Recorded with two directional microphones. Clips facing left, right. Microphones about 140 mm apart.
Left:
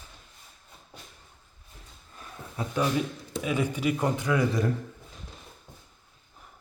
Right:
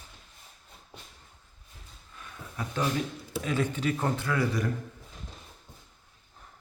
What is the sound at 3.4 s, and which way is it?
A man's voice, 10° left (ahead or behind).